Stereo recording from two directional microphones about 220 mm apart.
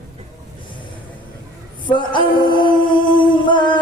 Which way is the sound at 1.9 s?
20° left (ahead or behind).